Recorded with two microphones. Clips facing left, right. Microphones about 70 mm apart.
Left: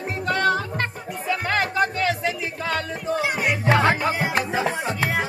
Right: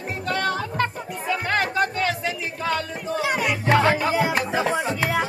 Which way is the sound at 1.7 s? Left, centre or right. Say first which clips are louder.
Left 1 dB; centre.